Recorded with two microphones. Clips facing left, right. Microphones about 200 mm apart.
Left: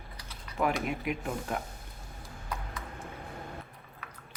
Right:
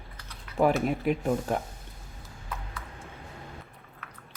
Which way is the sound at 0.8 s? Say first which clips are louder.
Right 7 dB; 35° right (ahead or behind).